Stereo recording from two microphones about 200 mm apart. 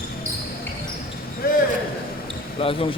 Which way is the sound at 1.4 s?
45° left (ahead or behind).